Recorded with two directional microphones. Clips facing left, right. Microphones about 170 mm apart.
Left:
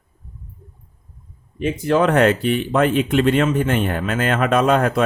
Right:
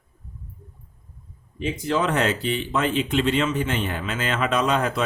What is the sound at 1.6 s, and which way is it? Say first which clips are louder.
Speech: left 6 dB; 55° left (ahead or behind).